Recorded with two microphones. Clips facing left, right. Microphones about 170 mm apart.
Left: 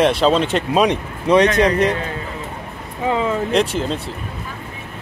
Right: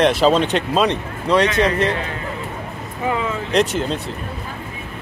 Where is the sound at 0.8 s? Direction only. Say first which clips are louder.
Left 2 dB; 15° left (ahead or behind).